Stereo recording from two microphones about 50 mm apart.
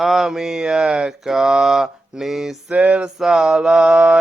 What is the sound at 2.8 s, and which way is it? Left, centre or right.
Mantra, right.